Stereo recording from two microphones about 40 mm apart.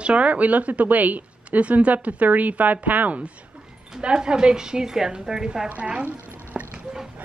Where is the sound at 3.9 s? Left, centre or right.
Centre.